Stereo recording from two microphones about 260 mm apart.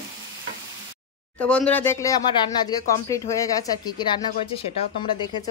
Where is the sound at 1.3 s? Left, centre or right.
Centre.